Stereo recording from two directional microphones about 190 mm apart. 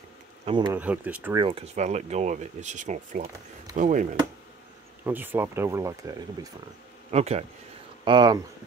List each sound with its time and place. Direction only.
0.5 s speech: 25° right (ahead or behind)
0.7 s speech: 10° right (ahead or behind)
1.3 s speech: 25° right (ahead or behind)
5.0 s speech: 10° right (ahead or behind)
7.1 s speech: 35° right (ahead or behind)
8.0 s speech: 25° right (ahead or behind)